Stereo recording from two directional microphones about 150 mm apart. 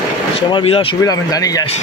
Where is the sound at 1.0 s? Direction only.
25° left (ahead or behind).